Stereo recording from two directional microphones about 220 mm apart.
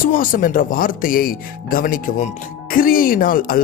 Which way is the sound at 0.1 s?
40° left (ahead or behind).